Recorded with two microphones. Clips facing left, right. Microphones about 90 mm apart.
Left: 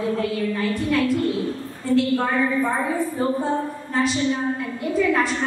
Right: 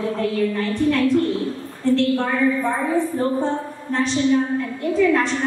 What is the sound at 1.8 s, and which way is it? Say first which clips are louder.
A woman's voice: right 2 dB; 5° left (ahead or behind).